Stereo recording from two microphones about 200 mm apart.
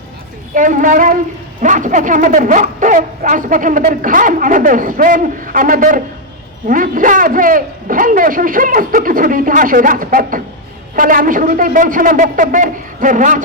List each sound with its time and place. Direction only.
0.5 s a man's voice: 40° right (ahead or behind)